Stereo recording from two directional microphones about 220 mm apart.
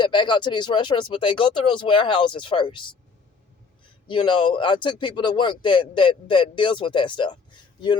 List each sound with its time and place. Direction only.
0.0 s speech: 20° left (ahead or behind)
4.1 s speech: 20° left (ahead or behind)